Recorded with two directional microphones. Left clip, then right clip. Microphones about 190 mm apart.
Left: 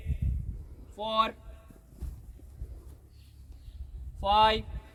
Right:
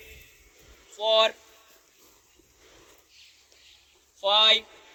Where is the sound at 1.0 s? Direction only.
60° left (ahead or behind).